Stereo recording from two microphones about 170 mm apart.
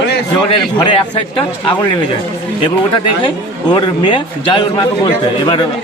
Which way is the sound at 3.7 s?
30° left (ahead or behind).